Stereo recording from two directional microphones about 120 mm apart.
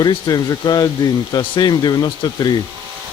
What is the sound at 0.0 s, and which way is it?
Speech, 35° left (ahead or behind).